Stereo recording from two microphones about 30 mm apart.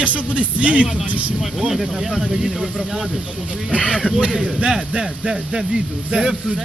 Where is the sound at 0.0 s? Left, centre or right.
Right.